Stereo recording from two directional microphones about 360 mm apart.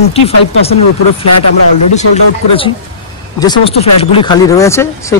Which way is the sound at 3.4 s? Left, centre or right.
Centre.